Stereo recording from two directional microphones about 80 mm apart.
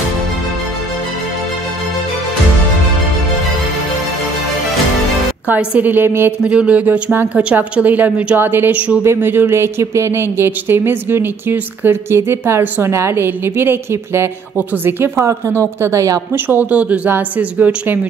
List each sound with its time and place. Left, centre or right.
5.6 s speech: centre
5.9 s a woman's voice: right
6.4 s a woman's voice: centre
9.0 s speech: right
15.1 s speech: right
16.4 s a woman's voice: centre